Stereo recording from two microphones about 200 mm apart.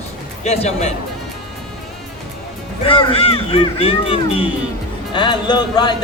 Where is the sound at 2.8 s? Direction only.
25° left (ahead or behind).